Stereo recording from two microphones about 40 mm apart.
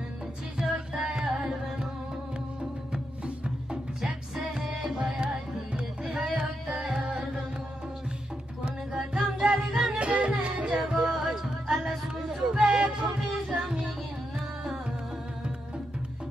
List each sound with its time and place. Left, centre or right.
0.6 s music: centre
4.8 s music: centre
6.2 s carnatic music: centre
7.1 s music: right
9.4 s music: right
10.9 s music: centre
11.7 s a sound: centre
12.6 s music: right
13.6 s music: centre